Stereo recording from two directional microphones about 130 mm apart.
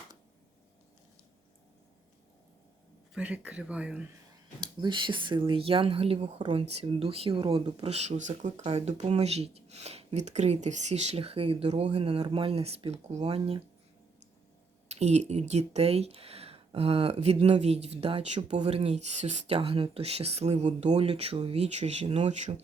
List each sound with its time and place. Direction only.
3.2 s speech: 10° right (ahead or behind)
4.6 s speech: 35° right (ahead or behind)
14.8 s speech: 60° right (ahead or behind)